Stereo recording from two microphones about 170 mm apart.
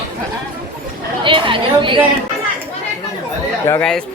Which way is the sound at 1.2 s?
30° right (ahead or behind).